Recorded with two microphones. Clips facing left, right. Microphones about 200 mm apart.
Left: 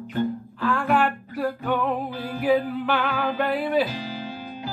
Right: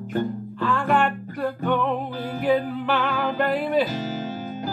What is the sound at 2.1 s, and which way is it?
Music, 45° right (ahead or behind).